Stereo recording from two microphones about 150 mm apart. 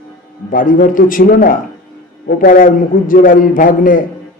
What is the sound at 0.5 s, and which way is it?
A man's voice, 65° left (ahead or behind).